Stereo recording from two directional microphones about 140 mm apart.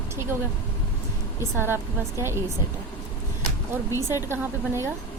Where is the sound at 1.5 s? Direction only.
15° right (ahead or behind).